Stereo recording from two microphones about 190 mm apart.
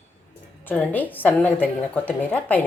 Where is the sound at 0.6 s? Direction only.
10° left (ahead or behind).